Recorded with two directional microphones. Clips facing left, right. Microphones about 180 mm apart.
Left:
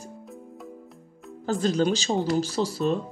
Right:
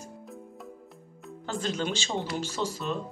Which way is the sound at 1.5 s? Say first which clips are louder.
Left 8 dB; 40° left (ahead or behind).